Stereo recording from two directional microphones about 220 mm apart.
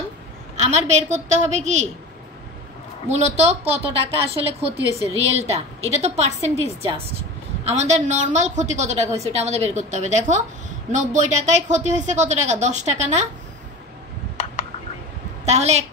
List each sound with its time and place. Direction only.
0.6 s a woman's voice: 30° right (ahead or behind)
3.1 s a woman's voice: 30° right (ahead or behind)
15.4 s a woman's voice: 30° right (ahead or behind)